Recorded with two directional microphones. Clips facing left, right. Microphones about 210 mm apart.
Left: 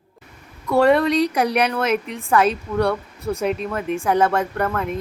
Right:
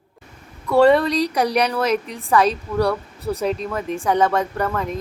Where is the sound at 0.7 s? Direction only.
Centre (ahead or behind).